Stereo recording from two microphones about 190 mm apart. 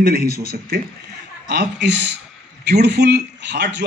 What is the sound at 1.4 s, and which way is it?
A man's voice, 65° right (ahead or behind).